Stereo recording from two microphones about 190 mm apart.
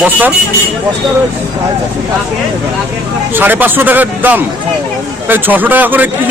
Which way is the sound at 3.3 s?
10° right (ahead or behind).